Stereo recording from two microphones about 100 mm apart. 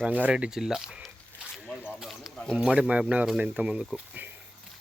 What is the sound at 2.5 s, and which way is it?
Speech, 10° right (ahead or behind).